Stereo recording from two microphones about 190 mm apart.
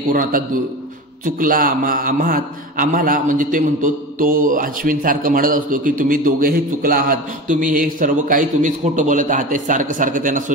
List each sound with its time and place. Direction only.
0.1 s a man's voice: 45° right (ahead or behind)